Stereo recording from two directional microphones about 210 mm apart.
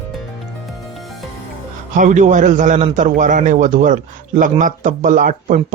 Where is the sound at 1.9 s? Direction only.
35° right (ahead or behind).